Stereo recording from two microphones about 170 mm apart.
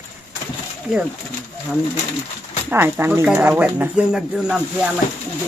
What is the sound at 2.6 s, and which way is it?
Speech, 10° right (ahead or behind).